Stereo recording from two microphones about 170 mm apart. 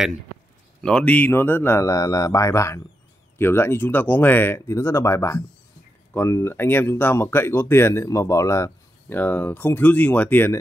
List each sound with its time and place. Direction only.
0.7 s speech: 5° left (ahead or behind)